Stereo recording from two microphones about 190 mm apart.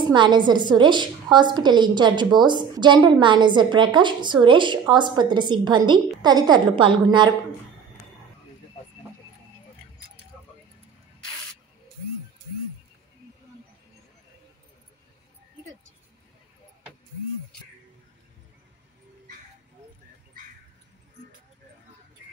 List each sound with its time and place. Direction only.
0.1 s a woman's voice: 25° right (ahead or behind)